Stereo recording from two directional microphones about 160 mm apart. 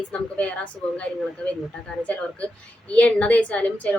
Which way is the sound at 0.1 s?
10° left (ahead or behind).